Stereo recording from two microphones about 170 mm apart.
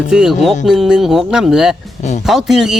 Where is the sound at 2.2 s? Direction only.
Centre (ahead or behind).